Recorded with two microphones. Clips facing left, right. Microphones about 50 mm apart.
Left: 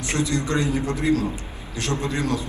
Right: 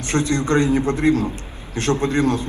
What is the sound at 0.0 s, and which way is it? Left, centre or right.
A man's voice, right.